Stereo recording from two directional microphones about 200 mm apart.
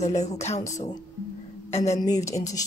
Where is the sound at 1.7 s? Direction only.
30° left (ahead or behind).